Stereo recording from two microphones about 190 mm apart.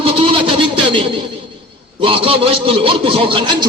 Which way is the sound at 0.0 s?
30° right (ahead or behind).